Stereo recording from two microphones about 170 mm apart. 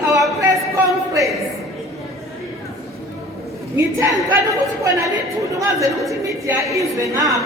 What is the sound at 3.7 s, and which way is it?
A woman's voice, 15° right (ahead or behind).